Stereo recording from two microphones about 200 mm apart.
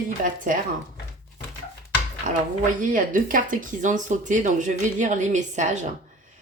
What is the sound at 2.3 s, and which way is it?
Speech, 40° right (ahead or behind).